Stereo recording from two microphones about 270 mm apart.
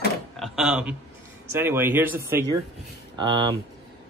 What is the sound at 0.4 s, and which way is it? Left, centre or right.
Speech, centre.